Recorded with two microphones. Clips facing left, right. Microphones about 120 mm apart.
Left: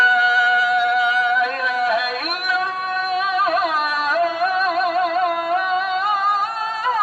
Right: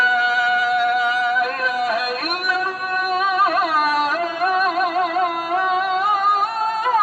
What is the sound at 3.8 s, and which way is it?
Carnatic music, 45° right (ahead or behind).